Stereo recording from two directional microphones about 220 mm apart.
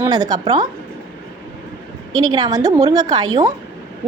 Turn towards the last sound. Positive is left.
turn(degrees=-15)  # may be behind; listen again after turning